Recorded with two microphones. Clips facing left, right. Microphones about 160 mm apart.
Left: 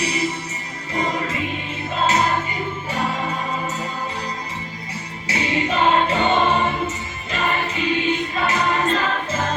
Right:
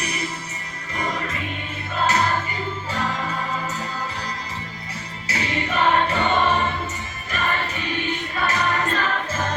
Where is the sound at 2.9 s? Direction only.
25° left (ahead or behind).